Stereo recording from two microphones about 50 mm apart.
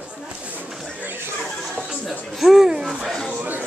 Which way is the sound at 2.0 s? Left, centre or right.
Centre.